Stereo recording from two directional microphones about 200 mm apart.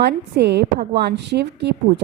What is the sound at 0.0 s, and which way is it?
A woman's voice, 55° right (ahead or behind).